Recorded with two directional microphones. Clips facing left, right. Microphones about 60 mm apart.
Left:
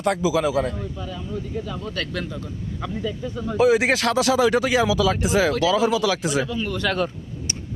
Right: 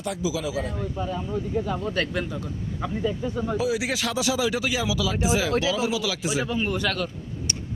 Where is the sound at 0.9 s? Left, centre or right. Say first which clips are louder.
Right 3 dB; right; by 3.6 s centre.